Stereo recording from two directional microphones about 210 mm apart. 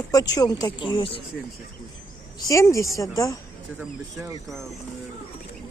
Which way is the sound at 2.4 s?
15° left (ahead or behind).